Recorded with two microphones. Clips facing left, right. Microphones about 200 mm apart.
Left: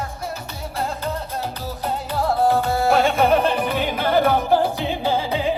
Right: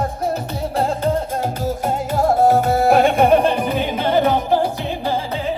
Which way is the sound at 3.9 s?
20° right (ahead or behind).